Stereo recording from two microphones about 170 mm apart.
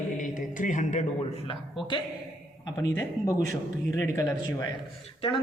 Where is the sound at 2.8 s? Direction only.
20° left (ahead or behind).